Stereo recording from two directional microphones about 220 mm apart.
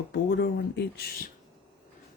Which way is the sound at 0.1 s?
50° left (ahead or behind).